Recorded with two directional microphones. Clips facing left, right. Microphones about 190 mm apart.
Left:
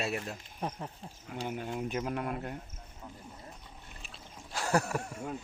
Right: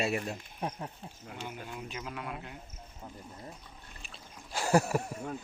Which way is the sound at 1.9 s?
50° left (ahead or behind).